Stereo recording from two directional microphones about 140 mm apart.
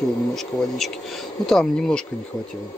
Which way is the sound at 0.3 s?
Centre (ahead or behind).